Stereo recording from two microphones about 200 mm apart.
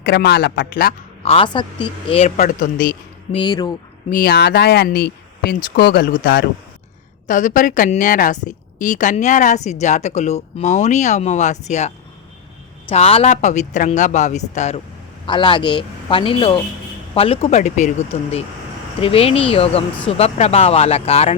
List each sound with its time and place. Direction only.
0.0 s speech: 55° left (ahead or behind)
1.2 s a woman's voice: 30° left (ahead or behind); by 3.0 s 45° left (ahead or behind)
3.3 s speech: 20° left (ahead or behind)
4.1 s speech: 50° left (ahead or behind)
7.3 s a woman's voice: 40° left (ahead or behind)
15.3 s a woman's voice: 25° left (ahead or behind)